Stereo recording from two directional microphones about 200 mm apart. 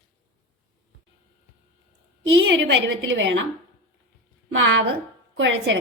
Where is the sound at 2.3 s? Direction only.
60° right (ahead or behind).